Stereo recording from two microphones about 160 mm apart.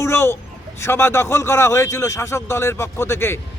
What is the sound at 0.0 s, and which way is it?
A woman's voice, 15° left (ahead or behind).